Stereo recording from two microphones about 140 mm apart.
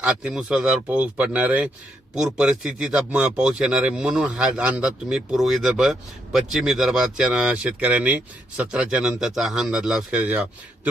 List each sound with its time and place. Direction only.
0.0 s a man's voice: 5° right (ahead or behind)